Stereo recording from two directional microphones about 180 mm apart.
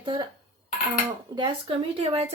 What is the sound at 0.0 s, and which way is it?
Speech, 25° right (ahead or behind).